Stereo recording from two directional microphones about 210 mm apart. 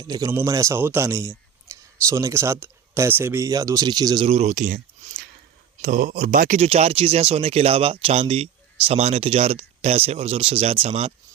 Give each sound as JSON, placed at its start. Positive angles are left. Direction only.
{"t": 0.0, "sound": "speech", "side_deg": -15}